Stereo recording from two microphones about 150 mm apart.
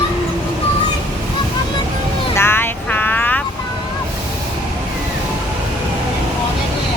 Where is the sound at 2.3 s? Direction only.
15° left (ahead or behind).